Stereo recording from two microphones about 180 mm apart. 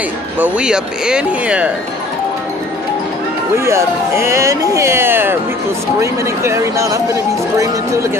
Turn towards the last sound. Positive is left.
turn(degrees=-15)  # may be behind; listen again after turning